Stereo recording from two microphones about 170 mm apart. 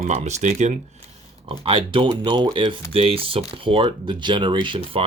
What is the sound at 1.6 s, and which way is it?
Speech, 30° right (ahead or behind).